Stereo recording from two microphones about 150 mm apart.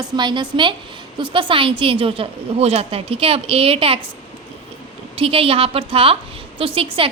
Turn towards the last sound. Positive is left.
turn(degrees=-40)  # may be behind; listen again after turning